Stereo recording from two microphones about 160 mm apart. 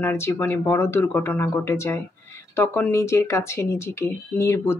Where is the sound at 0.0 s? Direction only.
15° left (ahead or behind).